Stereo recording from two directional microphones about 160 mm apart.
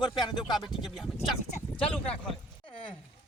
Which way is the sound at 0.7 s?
Centre (ahead or behind).